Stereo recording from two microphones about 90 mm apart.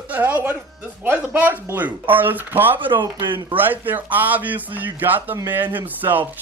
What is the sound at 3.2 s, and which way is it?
Speech, 65° right (ahead or behind).